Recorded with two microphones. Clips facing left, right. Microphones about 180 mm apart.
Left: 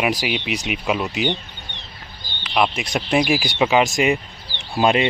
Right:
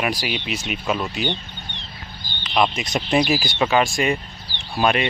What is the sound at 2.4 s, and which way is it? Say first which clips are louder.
Speech: even; 10° left (ahead or behind).